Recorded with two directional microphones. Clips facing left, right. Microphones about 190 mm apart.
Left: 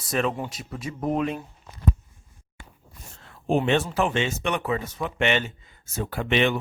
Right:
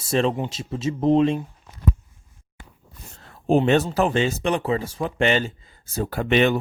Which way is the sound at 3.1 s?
40° right (ahead or behind).